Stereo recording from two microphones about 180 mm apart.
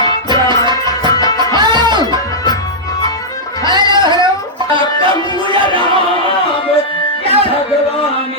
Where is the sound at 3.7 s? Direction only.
25° right (ahead or behind).